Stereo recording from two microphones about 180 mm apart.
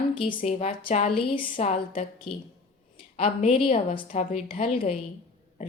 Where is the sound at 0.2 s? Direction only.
35° left (ahead or behind).